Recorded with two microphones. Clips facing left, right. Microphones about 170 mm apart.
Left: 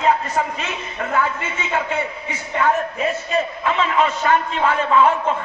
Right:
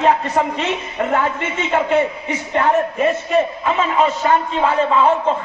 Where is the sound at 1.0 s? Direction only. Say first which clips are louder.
Right 3 dB; 25° right (ahead or behind).